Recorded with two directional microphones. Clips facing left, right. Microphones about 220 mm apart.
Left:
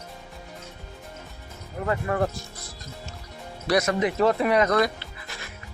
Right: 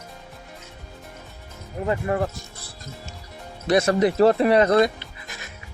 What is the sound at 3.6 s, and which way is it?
Speech, 30° right (ahead or behind).